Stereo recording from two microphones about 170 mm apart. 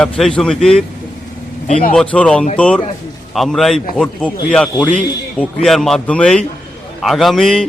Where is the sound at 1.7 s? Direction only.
50° left (ahead or behind).